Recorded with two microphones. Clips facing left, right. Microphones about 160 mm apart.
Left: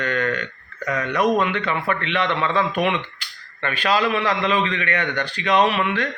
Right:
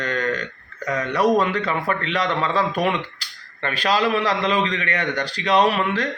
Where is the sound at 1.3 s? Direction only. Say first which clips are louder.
Right 1 dB; 35° right (ahead or behind).